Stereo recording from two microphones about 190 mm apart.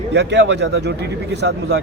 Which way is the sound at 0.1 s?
65° right (ahead or behind).